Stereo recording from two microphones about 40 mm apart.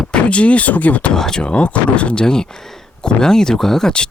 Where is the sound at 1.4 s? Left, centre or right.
Left.